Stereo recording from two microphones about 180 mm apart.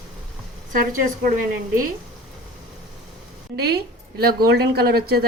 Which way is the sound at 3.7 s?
60° right (ahead or behind).